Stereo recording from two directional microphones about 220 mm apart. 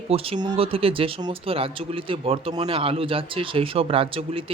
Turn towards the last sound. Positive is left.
turn(degrees=-25)  # may be behind; listen again after turning